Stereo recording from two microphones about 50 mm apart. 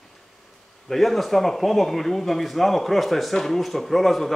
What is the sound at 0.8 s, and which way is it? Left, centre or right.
Speech, centre.